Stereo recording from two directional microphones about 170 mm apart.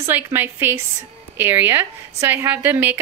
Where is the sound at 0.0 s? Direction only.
15° right (ahead or behind).